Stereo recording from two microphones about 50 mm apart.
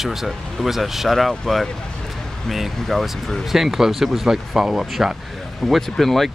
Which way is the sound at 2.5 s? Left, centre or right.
Centre.